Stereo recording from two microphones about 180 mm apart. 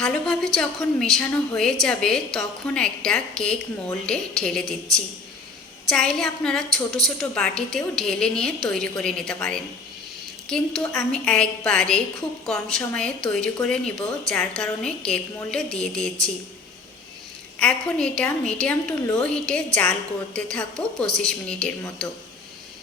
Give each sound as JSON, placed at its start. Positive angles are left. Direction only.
{"t": 0.0, "sound": "a woman's voice", "side_deg": 0}
{"t": 17.6, "sound": "a woman's voice", "side_deg": 5}